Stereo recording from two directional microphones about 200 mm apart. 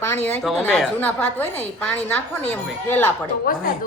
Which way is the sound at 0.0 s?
10° left (ahead or behind).